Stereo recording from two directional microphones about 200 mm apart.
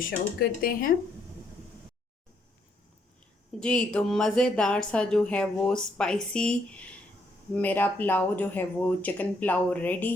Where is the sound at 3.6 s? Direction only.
5° left (ahead or behind).